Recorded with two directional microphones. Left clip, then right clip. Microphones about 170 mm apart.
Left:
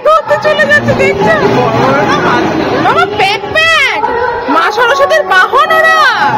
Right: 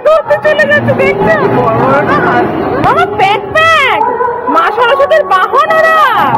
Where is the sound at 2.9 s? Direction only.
15° left (ahead or behind).